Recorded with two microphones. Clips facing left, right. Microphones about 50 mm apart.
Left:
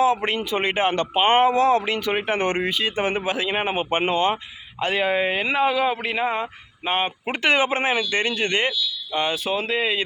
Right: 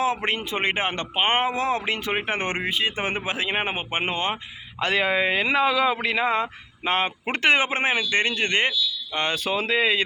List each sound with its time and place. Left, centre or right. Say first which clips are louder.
0.0 s speech: left 4 dB; right
4.8 s speech: left 1 dB; right
7.4 s speech: left 1 dB; right
9.1 s speech: left 2 dB; right